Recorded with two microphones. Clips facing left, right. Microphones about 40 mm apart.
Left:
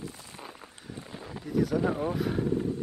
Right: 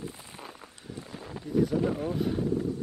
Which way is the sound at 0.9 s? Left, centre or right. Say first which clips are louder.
Right 1 dB; left.